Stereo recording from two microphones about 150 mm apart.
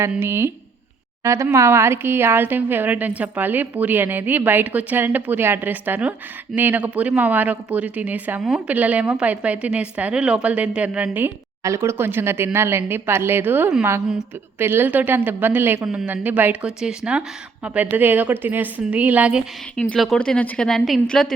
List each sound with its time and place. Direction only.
0.1 s a woman's voice: 15° right (ahead or behind)
19.7 s speech: 5° left (ahead or behind)